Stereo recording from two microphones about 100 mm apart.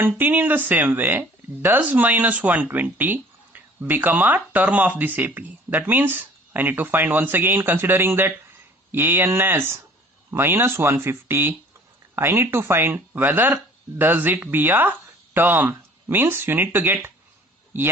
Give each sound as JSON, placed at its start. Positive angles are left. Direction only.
{"t": 0.0, "sound": "speech", "side_deg": -20}